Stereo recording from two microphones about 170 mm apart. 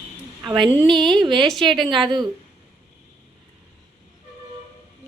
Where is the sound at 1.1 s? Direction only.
25° right (ahead or behind).